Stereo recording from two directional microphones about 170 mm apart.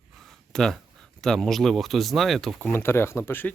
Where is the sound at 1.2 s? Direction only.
Centre (ahead or behind).